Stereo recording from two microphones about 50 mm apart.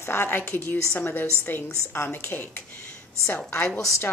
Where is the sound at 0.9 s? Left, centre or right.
Left.